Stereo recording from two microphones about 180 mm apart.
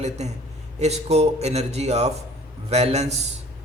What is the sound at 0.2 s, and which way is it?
A man's voice, 40° right (ahead or behind).